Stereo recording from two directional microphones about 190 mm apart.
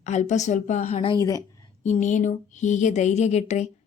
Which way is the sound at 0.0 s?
40° left (ahead or behind).